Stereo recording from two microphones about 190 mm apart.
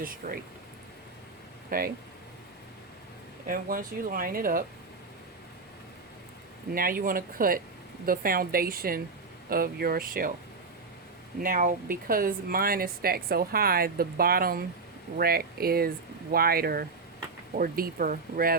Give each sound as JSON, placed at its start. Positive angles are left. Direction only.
{"t": 0.2, "sound": "speech", "side_deg": -50}
{"t": 1.7, "sound": "speech", "side_deg": -50}
{"t": 3.4, "sound": "speech", "side_deg": -45}
{"t": 6.7, "sound": "speech", "side_deg": -50}
{"t": 11.3, "sound": "speech", "side_deg": -45}